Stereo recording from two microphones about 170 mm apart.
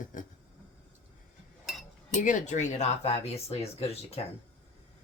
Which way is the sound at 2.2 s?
45° left (ahead or behind).